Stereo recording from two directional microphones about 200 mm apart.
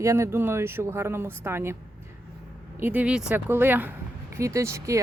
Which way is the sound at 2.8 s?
10° right (ahead or behind).